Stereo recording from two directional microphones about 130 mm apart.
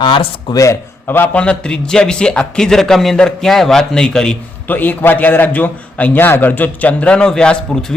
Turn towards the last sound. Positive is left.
turn(degrees=5)  # may be behind; listen again after turning